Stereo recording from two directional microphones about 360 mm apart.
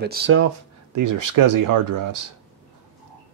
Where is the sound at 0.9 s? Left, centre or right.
Right.